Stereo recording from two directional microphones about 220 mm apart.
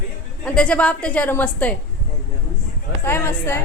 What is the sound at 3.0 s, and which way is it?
Speech, 10° left (ahead or behind).